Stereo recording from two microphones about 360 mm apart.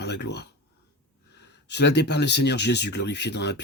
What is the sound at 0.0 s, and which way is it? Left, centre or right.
Speech, left.